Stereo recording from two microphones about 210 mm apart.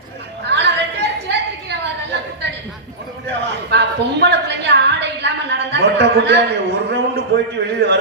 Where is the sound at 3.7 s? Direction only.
55° right (ahead or behind).